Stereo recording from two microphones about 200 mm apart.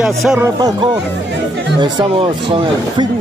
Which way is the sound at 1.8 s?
25° right (ahead or behind).